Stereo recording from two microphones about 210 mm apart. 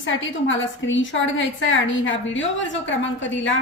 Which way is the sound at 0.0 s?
65° left (ahead or behind).